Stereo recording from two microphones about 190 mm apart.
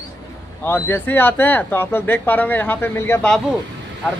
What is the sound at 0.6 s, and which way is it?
Speech, 10° left (ahead or behind).